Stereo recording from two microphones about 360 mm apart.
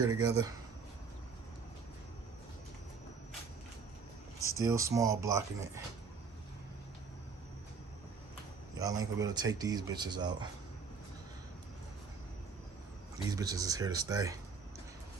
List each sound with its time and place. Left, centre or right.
0.1 s speech: centre
4.4 s speech: centre
8.8 s speech: centre
13.3 s speech: centre